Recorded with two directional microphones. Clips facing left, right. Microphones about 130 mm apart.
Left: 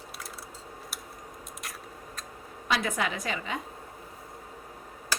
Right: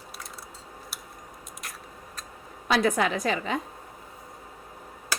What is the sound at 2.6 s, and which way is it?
Speech, 40° right (ahead or behind).